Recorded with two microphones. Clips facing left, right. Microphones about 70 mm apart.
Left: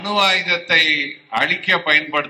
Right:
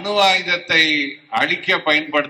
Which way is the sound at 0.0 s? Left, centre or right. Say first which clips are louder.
Right 2 dB; left.